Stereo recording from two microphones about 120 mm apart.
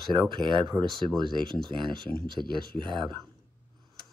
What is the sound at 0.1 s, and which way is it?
Speech, 40° right (ahead or behind).